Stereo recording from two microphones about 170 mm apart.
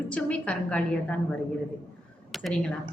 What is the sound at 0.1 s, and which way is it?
Speech, 5° left (ahead or behind).